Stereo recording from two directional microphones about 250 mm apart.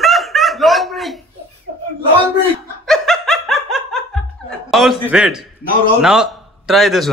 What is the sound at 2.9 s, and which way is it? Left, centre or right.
Laughter, centre.